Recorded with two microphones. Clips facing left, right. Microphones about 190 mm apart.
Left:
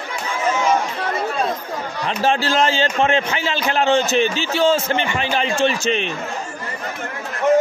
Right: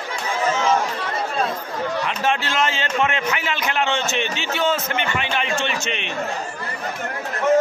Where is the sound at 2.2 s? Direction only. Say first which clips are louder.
Left 7 dB; 35° left (ahead or behind).